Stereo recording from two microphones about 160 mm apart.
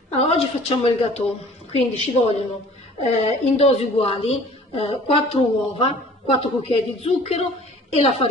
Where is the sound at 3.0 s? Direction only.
40° left (ahead or behind).